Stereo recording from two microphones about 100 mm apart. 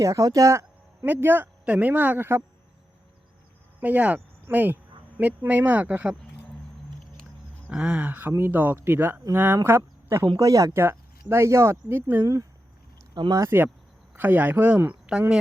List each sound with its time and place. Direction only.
0.0 s speech: 30° right (ahead or behind)
1.0 s speech: 20° right (ahead or behind)
3.8 s speech: 15° right (ahead or behind)
7.7 s speech: 10° right (ahead or behind)
12.2 s speech: 35° right (ahead or behind); by 14.8 s 15° right (ahead or behind)